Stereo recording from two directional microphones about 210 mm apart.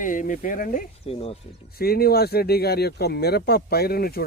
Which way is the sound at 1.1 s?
30° left (ahead or behind).